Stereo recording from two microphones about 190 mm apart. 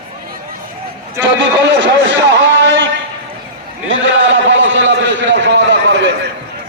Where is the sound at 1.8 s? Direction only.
75° right (ahead or behind).